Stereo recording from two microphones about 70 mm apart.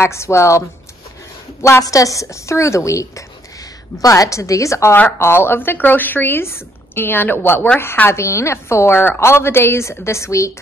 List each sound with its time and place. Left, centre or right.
0.0 s a woman's voice: left
5.2 s a woman's voice: left